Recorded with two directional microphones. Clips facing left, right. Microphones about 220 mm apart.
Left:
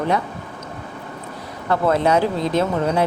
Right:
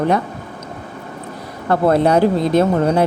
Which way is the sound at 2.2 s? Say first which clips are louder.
Right 5 dB; 50° right (ahead or behind).